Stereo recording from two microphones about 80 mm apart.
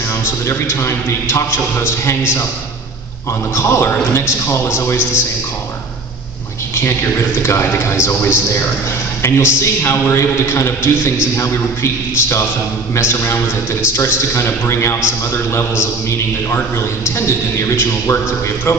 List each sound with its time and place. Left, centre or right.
0.2 s a man's voice: left
3.5 s a man's voice: left
7.4 s a man's voice: left